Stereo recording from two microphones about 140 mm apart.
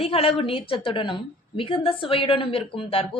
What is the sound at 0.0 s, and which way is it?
A woman's voice, 45° left (ahead or behind).